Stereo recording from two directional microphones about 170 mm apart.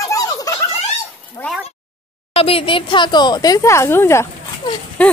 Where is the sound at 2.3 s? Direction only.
35° left (ahead or behind).